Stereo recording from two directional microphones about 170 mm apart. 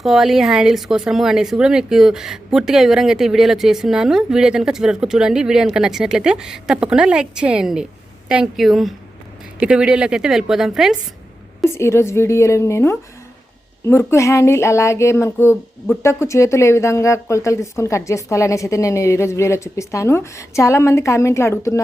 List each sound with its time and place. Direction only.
0.0 s speech: centre (ahead or behind)
11.7 s speech: 15° left (ahead or behind)